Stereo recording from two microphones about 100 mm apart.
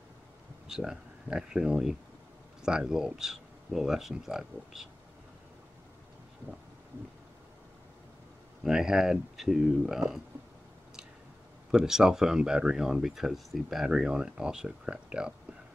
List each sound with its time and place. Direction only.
0.7 s speech: 5° right (ahead or behind)
8.6 s speech: 5° right (ahead or behind)
11.7 s speech: 5° right (ahead or behind)